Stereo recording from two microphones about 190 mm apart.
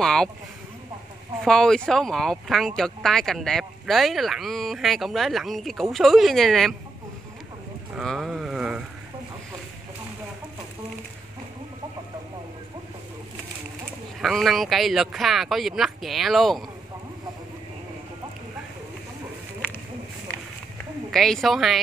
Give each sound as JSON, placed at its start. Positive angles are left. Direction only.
{"t": 0.0, "sound": "speech", "side_deg": 5}
{"t": 1.4, "sound": "speech", "side_deg": 0}
{"t": 7.9, "sound": "a sound", "side_deg": 0}
{"t": 14.2, "sound": "speech", "side_deg": 0}
{"t": 21.1, "sound": "speech", "side_deg": 0}